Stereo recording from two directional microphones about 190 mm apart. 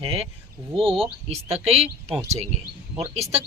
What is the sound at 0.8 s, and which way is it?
Speech, 30° right (ahead or behind).